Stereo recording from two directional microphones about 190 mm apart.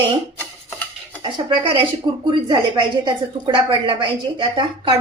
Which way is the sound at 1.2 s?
25° right (ahead or behind).